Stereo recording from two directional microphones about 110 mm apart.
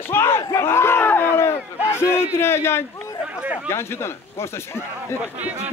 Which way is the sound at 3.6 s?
25° left (ahead or behind).